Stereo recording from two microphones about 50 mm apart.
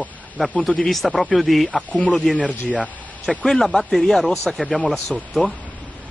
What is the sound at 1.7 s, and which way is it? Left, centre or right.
Speech, left.